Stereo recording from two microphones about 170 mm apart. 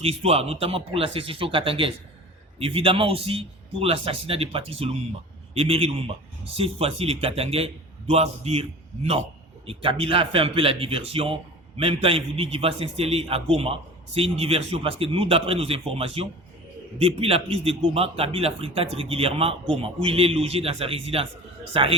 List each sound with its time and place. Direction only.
0.0 s a man's voice: 35° right (ahead or behind)
9.6 s a man's voice: 35° right (ahead or behind)